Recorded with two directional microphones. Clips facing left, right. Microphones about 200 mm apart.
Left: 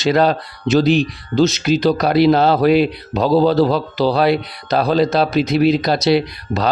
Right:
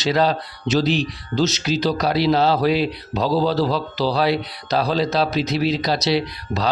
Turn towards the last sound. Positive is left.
turn(degrees=55)  # may be behind; listen again after turning